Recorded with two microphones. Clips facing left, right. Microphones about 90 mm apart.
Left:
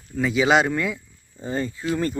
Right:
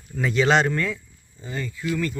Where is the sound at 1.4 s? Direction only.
35° left (ahead or behind).